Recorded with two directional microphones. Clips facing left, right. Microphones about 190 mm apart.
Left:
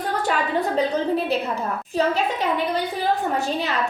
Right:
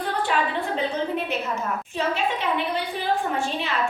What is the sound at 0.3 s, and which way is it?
A woman's voice, 40° left (ahead or behind).